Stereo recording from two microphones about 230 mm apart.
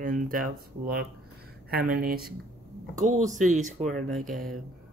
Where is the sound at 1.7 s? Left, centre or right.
Right.